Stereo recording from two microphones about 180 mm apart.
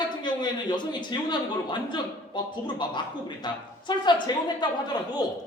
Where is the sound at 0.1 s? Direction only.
25° left (ahead or behind).